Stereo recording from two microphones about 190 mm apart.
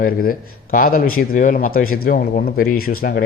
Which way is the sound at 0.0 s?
50° left (ahead or behind).